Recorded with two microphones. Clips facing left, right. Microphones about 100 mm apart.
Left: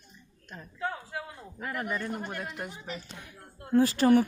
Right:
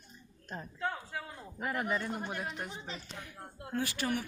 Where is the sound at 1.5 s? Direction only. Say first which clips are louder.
Even; 20° right (ahead or behind).